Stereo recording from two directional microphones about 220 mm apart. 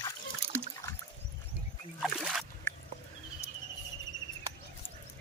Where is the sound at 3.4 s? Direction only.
15° left (ahead or behind).